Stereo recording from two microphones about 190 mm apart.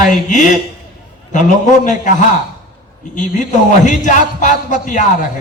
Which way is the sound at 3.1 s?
40° left (ahead or behind).